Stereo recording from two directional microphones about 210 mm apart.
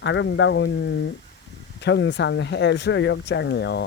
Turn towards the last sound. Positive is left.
turn(degrees=55)  # may be behind; listen again after turning